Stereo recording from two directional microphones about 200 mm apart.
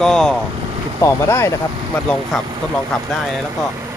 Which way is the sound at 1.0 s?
15° left (ahead or behind).